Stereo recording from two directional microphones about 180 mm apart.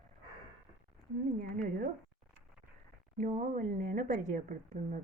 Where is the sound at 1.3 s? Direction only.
50° right (ahead or behind).